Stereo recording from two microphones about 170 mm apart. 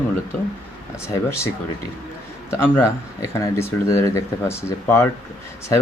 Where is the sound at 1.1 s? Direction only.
15° left (ahead or behind).